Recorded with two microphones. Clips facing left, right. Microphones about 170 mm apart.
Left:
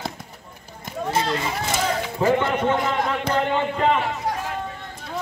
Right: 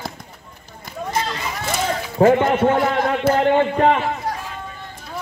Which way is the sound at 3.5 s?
55° right (ahead or behind).